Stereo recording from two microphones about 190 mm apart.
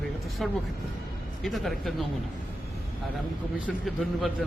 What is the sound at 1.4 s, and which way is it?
Speech, centre (ahead or behind).